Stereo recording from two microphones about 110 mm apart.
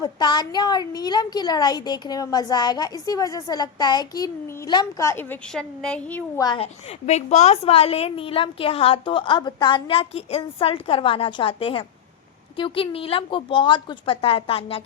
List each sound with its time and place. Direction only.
0.0 s a woman's voice: 40° left (ahead or behind); by 5.4 s 20° left (ahead or behind)
5.5 s speech: 5° left (ahead or behind)
6.3 s a woman's voice: 35° left (ahead or behind)
6.6 s a woman's voice: 90° left; by 14.8 s 60° left (ahead or behind)